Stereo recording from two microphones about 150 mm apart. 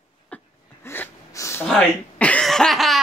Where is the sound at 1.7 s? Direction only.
5° left (ahead or behind).